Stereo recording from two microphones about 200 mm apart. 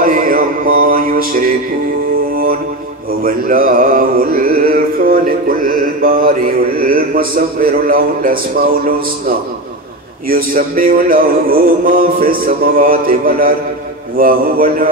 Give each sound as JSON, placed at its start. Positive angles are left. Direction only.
{"t": 0.0, "sound": "mantra", "side_deg": -45}
{"t": 10.2, "sound": "music", "side_deg": -45}